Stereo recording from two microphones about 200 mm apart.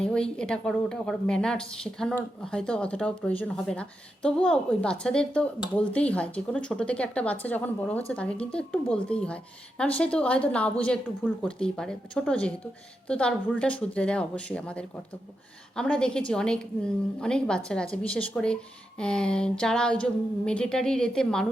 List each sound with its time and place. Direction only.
0.0 s a woman's voice: 5° left (ahead or behind)